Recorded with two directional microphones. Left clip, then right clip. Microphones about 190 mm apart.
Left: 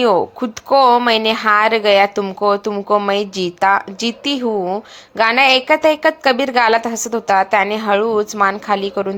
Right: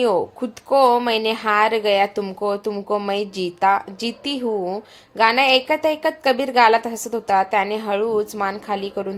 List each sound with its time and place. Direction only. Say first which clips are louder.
0.3 s a woman's voice: left 4 dB; 15° left (ahead or behind)